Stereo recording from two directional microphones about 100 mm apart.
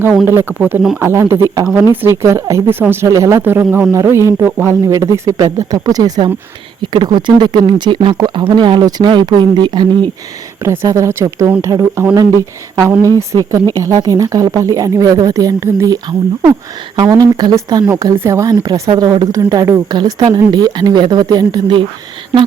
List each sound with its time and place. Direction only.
0.3 s speech: 20° right (ahead or behind); by 10.0 s 50° right (ahead or behind)
10.6 s speech: 30° right (ahead or behind)
17.0 s speech: 40° right (ahead or behind)